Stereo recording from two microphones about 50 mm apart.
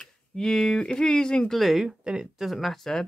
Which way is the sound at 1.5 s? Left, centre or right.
Centre.